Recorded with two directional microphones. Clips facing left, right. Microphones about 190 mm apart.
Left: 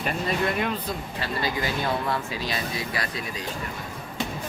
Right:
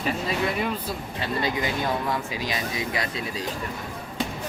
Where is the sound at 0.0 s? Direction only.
5° right (ahead or behind).